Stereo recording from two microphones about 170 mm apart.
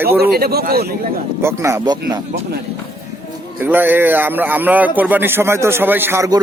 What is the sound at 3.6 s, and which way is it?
A man's voice, 10° right (ahead or behind).